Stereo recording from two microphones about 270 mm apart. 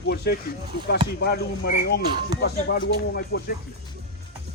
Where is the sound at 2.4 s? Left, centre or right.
Left.